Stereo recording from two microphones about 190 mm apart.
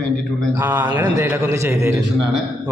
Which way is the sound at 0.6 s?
10° right (ahead or behind).